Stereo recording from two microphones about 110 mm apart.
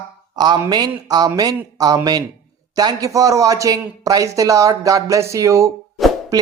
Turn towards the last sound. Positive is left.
turn(degrees=-35)  # may be behind; listen again after turning